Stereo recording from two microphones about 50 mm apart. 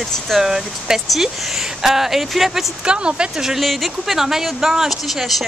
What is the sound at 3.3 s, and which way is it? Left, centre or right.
Speech, centre.